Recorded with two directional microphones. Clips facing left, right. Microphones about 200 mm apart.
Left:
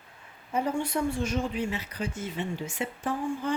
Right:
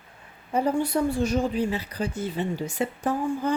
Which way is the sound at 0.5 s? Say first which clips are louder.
Right 5 dB; 35° right (ahead or behind).